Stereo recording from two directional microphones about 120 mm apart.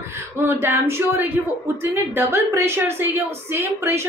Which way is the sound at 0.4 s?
20° right (ahead or behind).